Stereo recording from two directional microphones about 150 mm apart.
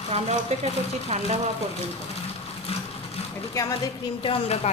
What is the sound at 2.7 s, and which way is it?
Speech, 40° left (ahead or behind).